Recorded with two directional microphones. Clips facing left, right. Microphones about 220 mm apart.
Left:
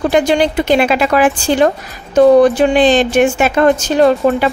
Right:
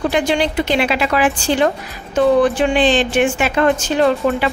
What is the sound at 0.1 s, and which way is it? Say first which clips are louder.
A woman's voice: left 5 dB; 45° left (ahead or behind).